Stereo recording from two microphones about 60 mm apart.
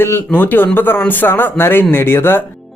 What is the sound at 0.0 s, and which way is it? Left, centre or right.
Speech, left.